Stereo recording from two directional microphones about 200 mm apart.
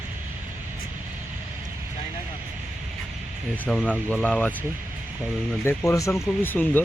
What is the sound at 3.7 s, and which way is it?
Speech, 5° left (ahead or behind).